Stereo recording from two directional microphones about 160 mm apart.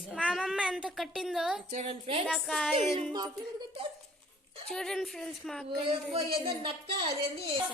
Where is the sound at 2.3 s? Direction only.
Centre (ahead or behind).